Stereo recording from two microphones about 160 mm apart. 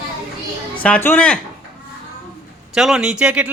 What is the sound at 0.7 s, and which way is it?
Speech, 10° left (ahead or behind).